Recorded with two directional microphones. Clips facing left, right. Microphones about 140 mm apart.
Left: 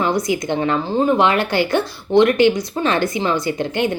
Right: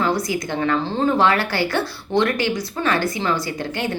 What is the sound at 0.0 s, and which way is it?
A woman's voice, 20° left (ahead or behind).